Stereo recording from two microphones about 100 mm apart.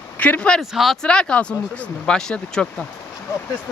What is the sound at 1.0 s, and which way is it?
Speech, 10° left (ahead or behind).